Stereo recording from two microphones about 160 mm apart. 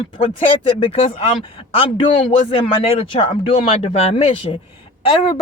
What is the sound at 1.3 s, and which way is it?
Speech, 35° left (ahead or behind).